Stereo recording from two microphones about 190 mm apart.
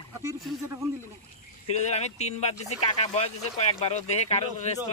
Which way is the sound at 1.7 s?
35° left (ahead or behind).